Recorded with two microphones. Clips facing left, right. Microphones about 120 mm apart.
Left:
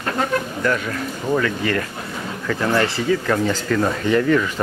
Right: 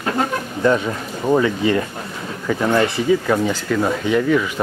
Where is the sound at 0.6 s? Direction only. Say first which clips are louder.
Right 4 dB; 20° right (ahead or behind).